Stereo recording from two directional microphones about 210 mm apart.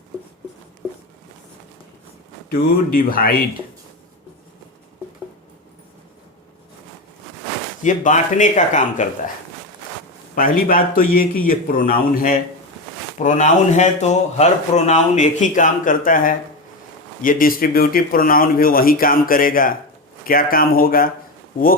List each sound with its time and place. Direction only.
2.5 s speech: 45° left (ahead or behind)
7.9 s speech: 35° left (ahead or behind)
10.3 s speech: 40° left (ahead or behind)